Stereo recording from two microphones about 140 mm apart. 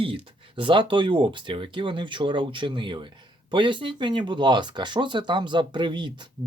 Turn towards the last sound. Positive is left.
turn(degrees=-35)  # may be behind; listen again after turning